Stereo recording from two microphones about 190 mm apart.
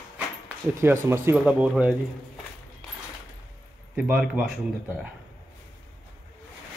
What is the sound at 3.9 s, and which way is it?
Speech, 5° right (ahead or behind).